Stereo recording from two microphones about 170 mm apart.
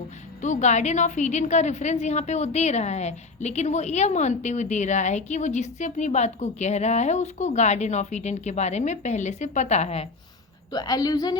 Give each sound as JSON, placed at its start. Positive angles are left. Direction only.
{"t": 0.4, "sound": "a woman's voice", "side_deg": 45}
{"t": 10.7, "sound": "a woman's voice", "side_deg": 20}